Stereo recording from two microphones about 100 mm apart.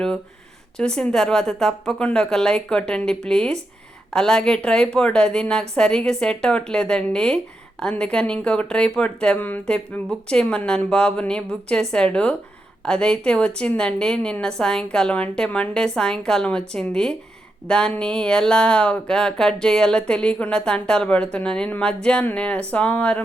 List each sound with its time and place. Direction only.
0.8 s speech: 10° left (ahead or behind)